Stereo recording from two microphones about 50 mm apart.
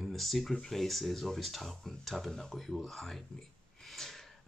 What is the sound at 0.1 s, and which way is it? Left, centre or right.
Speech, centre.